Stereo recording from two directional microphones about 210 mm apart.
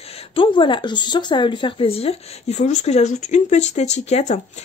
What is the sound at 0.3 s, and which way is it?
A woman's voice, 25° left (ahead or behind).